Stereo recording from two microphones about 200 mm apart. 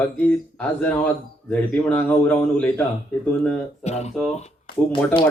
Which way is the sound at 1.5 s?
10° left (ahead or behind).